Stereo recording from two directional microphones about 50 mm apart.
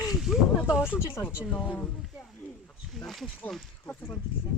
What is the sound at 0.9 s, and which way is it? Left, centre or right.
Speech, left.